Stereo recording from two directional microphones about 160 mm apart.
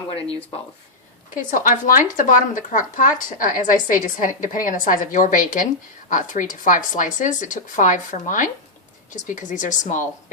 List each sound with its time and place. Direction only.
1.5 s speech: 55° left (ahead or behind)